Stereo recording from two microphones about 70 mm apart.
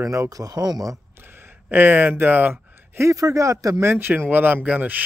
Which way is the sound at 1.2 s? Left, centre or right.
Right.